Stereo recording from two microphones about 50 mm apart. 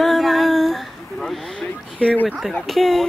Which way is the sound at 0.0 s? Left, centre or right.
Centre.